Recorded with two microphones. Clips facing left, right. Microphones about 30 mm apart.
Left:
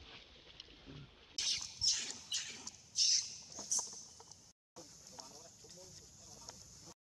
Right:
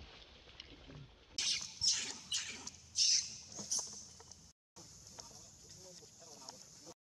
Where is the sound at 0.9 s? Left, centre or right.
Centre.